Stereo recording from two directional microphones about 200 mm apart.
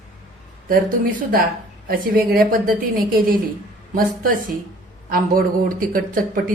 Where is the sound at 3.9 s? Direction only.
45° right (ahead or behind).